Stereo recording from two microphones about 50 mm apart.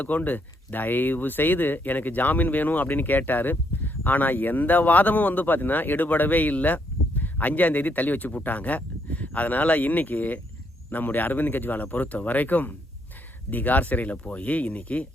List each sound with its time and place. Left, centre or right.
0.0 s speech: left